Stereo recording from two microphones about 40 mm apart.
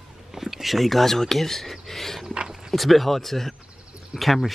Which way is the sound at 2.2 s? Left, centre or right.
Right.